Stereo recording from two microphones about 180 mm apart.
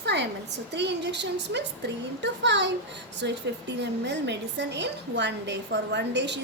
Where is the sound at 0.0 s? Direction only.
70° right (ahead or behind).